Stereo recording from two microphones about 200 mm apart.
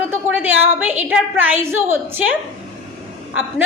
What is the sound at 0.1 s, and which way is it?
A woman's voice, 10° right (ahead or behind).